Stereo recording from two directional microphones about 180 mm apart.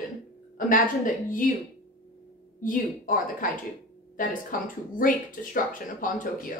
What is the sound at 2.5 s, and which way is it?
Speech, 50° left (ahead or behind).